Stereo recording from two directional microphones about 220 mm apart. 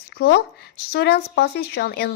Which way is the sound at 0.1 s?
50° left (ahead or behind).